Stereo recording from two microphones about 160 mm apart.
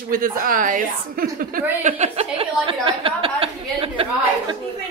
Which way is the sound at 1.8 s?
45° right (ahead or behind).